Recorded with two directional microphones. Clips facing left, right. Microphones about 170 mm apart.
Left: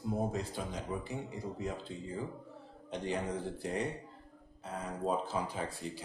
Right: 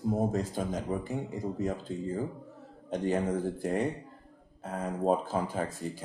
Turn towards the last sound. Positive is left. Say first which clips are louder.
# right 5 dB
turn(degrees=-45)  # may be behind; listen again after turning